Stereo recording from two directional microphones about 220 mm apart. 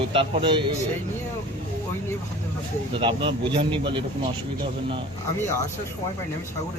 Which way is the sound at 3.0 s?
25° right (ahead or behind).